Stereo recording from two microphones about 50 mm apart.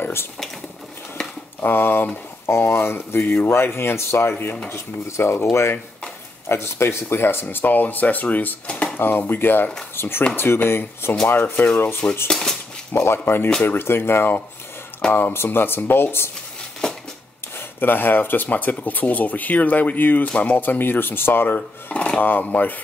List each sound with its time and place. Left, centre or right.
0.0 s mechanisms: left
1.6 s speech: left
4.6 s speech: left
7.5 s speech: left
12.3 s dishes: centre
12.9 s speech: left
16.8 s a sound: centre
17.6 s speech: left
21.5 s speech: left
22.2 s speech: left